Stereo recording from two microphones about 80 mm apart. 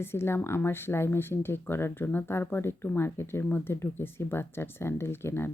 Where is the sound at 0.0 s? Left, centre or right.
Left.